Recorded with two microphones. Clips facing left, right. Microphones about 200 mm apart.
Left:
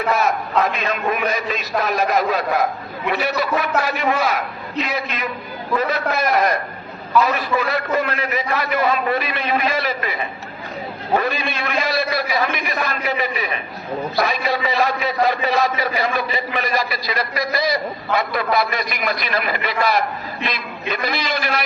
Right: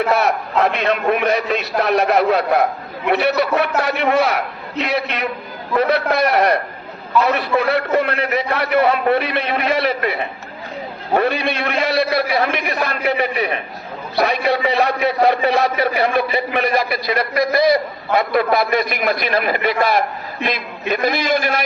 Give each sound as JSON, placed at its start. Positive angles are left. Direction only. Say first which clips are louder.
{"t": 0.1, "sound": "a man's voice", "louder": "right 2 dB", "side_deg": -65}